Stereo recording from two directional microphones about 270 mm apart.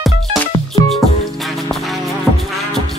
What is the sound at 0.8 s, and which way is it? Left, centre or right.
Music, centre.